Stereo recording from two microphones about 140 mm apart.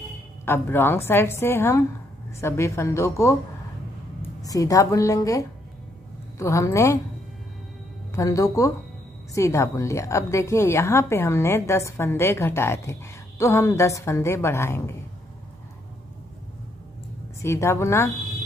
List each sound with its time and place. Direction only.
0.5 s a woman's voice: 15° left (ahead or behind)
8.1 s a woman's voice: 25° left (ahead or behind)
17.4 s a woman's voice: 20° left (ahead or behind)